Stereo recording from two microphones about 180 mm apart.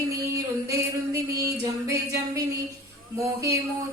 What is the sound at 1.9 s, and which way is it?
Speech, 15° right (ahead or behind).